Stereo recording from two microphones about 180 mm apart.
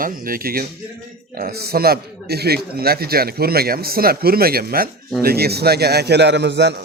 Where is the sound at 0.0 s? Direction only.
55° right (ahead or behind).